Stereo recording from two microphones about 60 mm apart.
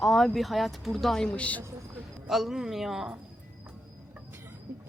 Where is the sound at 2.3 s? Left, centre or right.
Centre.